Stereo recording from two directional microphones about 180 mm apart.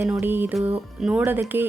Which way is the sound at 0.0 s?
10° right (ahead or behind).